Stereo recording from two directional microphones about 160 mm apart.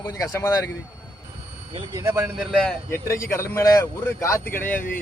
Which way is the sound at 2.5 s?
5° left (ahead or behind).